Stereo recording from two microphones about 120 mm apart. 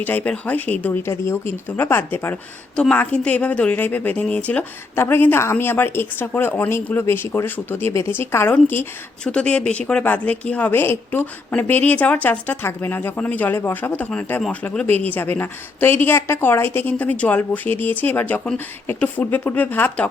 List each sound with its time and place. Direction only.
0.0 s speech: 15° left (ahead or behind)